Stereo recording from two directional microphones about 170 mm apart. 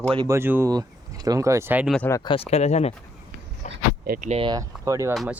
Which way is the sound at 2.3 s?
35° left (ahead or behind).